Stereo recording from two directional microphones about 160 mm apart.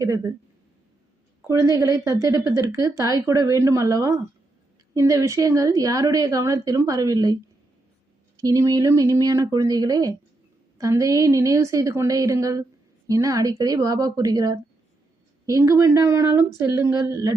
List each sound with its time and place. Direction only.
0.0 s a woman's voice: 20° right (ahead or behind)
1.5 s a woman's voice: 20° right (ahead or behind)
8.4 s a woman's voice: 20° right (ahead or behind)